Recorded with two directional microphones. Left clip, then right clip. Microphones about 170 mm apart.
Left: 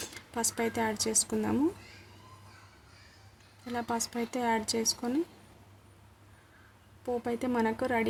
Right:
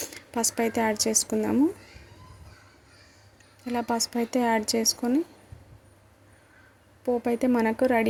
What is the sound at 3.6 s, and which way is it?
Speech, 20° right (ahead or behind).